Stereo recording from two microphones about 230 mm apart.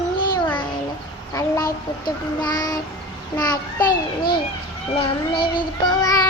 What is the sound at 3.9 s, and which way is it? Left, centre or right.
Speech, left.